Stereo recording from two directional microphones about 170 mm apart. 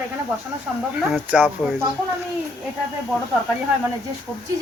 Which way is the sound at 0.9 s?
5° right (ahead or behind).